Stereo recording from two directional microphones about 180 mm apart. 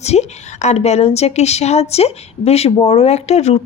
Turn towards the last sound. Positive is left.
turn(degrees=35)  # may be behind; listen again after turning